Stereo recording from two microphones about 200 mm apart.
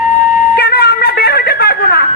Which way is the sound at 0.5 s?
50° left (ahead or behind).